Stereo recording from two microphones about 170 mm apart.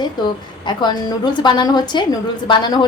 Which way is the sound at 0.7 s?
25° left (ahead or behind).